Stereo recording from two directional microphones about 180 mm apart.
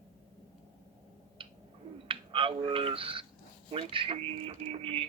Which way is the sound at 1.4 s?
30° right (ahead or behind).